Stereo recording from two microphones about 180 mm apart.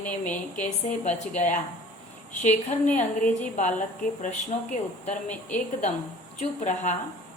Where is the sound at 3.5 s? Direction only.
45° left (ahead or behind).